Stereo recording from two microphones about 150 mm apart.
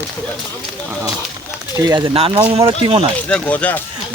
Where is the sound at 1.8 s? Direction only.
25° right (ahead or behind).